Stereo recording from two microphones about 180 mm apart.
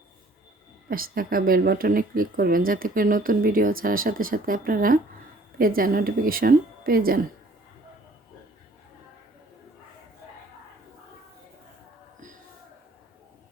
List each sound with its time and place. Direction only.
0.9 s speech: 55° right (ahead or behind)